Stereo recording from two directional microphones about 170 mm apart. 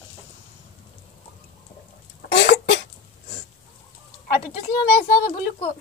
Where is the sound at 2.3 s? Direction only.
85° left.